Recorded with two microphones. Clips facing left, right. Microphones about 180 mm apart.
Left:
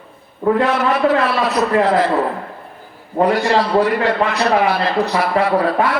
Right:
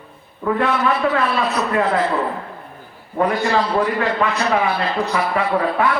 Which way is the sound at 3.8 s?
35° left (ahead or behind).